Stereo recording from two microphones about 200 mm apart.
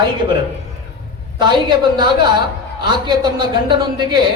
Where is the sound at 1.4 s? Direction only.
20° right (ahead or behind).